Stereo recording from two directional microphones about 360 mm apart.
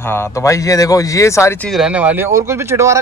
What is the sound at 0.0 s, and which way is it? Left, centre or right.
Speech, centre.